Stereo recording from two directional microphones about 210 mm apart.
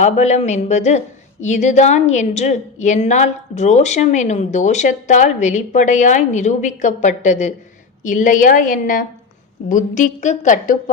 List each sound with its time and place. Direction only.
0.0 s a woman's voice: 35° left (ahead or behind)